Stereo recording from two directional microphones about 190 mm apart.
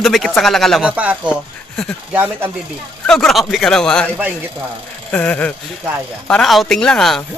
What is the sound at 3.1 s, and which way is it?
Speech, centre (ahead or behind).